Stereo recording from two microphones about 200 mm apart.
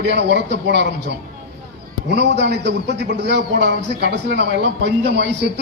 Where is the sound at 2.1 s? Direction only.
60° right (ahead or behind).